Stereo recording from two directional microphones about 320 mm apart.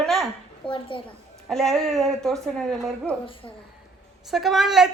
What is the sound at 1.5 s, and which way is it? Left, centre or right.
A woman's voice, centre.